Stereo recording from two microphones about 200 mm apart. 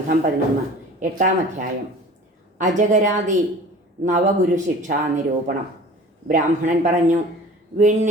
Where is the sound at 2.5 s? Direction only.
40° right (ahead or behind).